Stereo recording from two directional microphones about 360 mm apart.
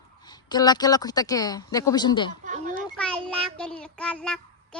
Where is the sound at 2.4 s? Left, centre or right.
Right.